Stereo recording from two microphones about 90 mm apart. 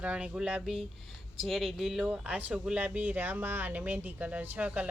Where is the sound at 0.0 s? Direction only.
10° right (ahead or behind).